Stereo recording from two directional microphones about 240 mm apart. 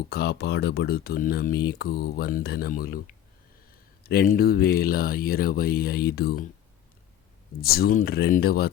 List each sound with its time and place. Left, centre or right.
0.1 s speech: left
7.6 s speech: left